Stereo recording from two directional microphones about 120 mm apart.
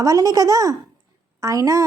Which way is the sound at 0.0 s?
30° right (ahead or behind).